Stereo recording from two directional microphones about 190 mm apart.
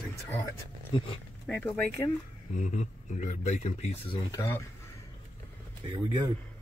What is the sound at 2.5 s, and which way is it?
Speech, 40° left (ahead or behind).